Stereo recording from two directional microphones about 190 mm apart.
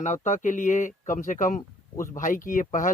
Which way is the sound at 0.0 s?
40° left (ahead or behind).